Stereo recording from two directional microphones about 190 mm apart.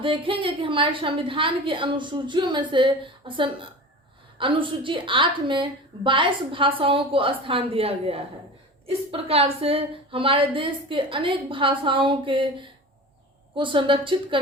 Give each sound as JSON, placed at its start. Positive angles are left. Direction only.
{"t": 0.0, "sound": "a woman's voice", "side_deg": -25}